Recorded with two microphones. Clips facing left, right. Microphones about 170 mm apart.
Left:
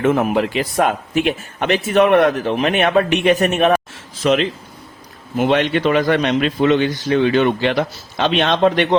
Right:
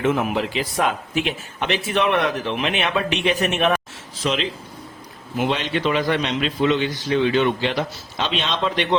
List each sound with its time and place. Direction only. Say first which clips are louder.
0.0 s a man's voice: left 5 dB; 55° left (ahead or behind)